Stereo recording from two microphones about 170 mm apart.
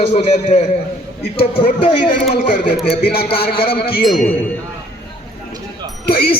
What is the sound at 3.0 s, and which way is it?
Music, 65° left (ahead or behind).